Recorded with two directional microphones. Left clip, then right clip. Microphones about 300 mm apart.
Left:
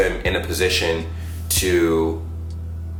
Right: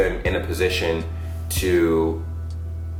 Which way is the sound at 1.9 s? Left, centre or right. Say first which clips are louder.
Left 1 dB; right.